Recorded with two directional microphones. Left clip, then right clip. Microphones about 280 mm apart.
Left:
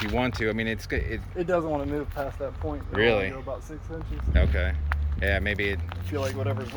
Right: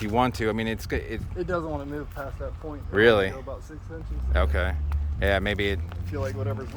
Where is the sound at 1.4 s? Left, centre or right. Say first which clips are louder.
Left 4 dB; left.